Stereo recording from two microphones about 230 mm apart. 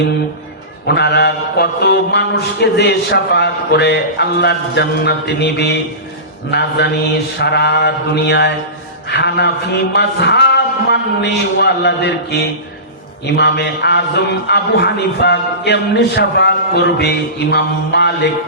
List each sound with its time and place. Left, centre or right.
0.9 s a man's voice: left